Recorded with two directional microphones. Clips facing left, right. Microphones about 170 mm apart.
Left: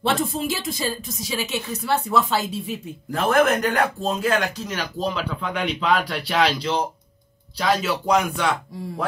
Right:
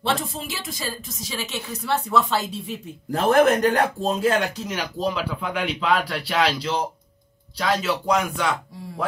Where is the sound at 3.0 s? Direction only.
35° right (ahead or behind).